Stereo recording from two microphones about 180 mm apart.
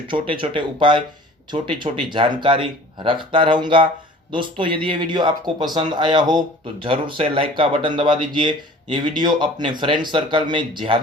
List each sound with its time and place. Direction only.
0.1 s speech: 30° right (ahead or behind)
2.0 s speech: 25° right (ahead or behind)